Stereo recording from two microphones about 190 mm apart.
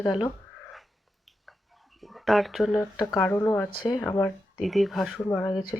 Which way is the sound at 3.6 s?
20° left (ahead or behind).